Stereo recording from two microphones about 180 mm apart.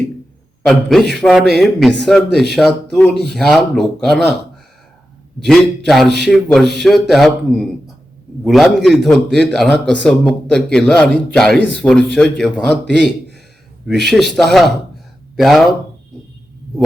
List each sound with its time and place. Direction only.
0.6 s a man's voice: centre (ahead or behind)
5.5 s a man's voice: centre (ahead or behind)